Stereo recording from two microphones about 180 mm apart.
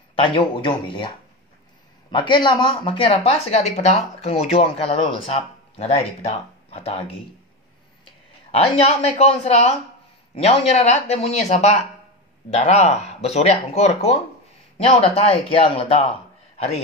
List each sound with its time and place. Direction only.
0.1 s speech: 30° left (ahead or behind)
2.1 s speech: 25° left (ahead or behind)
8.0 s a sound: 30° left (ahead or behind)
9.1 s a man's voice: 35° left (ahead or behind)